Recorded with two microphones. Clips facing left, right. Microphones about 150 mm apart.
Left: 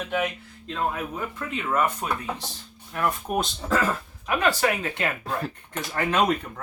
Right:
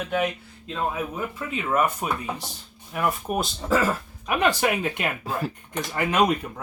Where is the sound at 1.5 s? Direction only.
10° right (ahead or behind).